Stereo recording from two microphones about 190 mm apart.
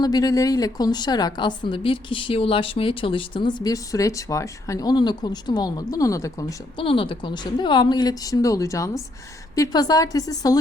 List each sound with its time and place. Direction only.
0.0 s a woman's voice: 20° left (ahead or behind)